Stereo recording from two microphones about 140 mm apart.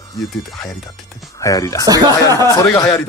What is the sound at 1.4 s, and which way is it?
Speech, 25° left (ahead or behind).